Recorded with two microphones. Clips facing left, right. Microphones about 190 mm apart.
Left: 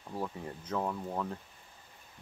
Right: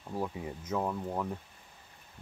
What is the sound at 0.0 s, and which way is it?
Speech, 10° right (ahead or behind).